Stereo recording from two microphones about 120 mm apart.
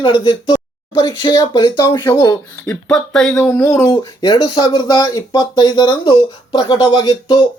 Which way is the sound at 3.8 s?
30° left (ahead or behind).